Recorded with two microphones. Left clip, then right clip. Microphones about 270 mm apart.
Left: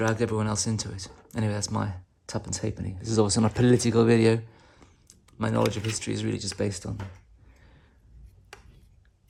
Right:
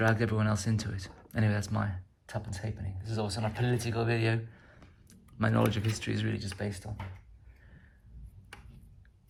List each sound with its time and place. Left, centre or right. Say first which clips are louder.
0.0 s speech: left 3 dB; centre
2.7 s speech: left 14 dB; left
5.0 s a sound: left 1 dB; centre
6.0 s speech: left 4 dB; centre